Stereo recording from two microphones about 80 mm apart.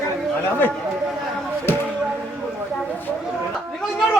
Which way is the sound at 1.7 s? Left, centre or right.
Left.